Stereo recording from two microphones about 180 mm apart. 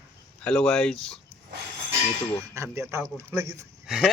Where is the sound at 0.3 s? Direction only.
5° left (ahead or behind).